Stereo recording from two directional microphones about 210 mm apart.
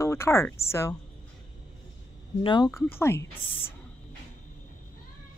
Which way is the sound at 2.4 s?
20° left (ahead or behind).